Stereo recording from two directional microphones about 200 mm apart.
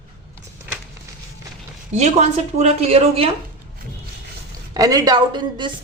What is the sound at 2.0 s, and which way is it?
Speech, 35° right (ahead or behind).